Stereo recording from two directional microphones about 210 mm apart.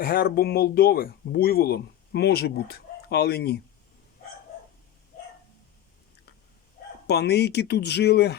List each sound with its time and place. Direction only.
0.0 s speech: 45° left (ahead or behind)
7.1 s speech: 50° left (ahead or behind)